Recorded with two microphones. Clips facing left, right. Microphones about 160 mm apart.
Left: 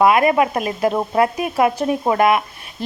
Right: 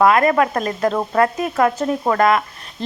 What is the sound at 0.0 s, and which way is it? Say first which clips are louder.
Speech: even; 15° left (ahead or behind).